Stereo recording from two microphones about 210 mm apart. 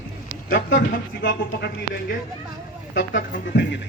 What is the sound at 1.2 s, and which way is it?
Speech, 55° left (ahead or behind).